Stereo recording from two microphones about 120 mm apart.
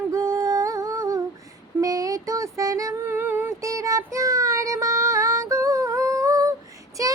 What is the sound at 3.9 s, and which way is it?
Child singing, 25° right (ahead or behind).